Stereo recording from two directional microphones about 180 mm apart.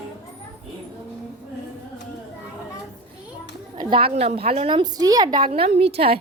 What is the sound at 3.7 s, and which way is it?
A woman's voice, 30° right (ahead or behind).